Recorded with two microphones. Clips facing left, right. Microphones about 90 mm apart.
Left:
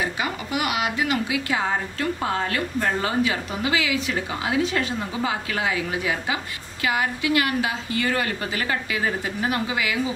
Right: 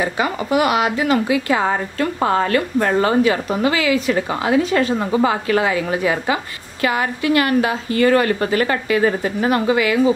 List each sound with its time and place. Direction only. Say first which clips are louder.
0.0 s a woman's voice: right 6 dB; 40° right (ahead or behind)
1.7 s a woman's voice: right 5 dB; 55° right (ahead or behind)